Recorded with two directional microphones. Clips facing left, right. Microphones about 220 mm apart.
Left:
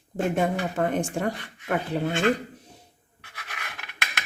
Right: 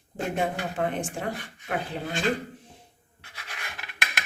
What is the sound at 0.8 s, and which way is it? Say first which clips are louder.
Speech: left 3 dB; 45° left (ahead or behind).